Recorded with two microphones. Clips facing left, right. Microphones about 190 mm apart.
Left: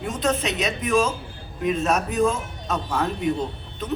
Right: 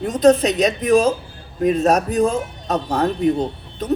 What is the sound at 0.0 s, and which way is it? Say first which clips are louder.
Speech: right 10 dB; 35° right (ahead or behind).